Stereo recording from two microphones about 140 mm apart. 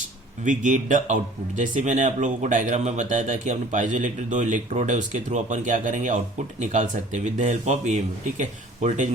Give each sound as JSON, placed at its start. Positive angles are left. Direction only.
{"t": 0.4, "sound": "speech", "side_deg": -65}